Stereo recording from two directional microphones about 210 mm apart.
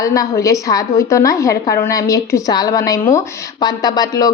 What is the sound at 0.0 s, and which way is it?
A woman's voice, 15° left (ahead or behind).